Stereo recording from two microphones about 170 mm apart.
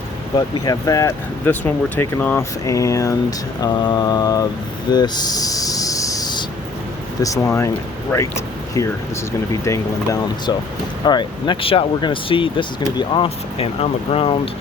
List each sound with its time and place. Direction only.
0.3 s speech: 20° left (ahead or behind)
4.9 s a sound: 25° left (ahead or behind)
7.2 s speech: 15° left (ahead or behind)
9.5 s speech: 20° left (ahead or behind); by 14.5 s 35° left (ahead or behind)